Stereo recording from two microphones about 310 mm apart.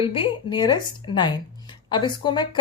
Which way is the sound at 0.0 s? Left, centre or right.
Centre.